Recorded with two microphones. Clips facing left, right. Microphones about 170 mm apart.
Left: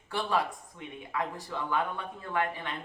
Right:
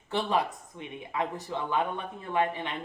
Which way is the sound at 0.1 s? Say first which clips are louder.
Right 2 dB; 20° right (ahead or behind).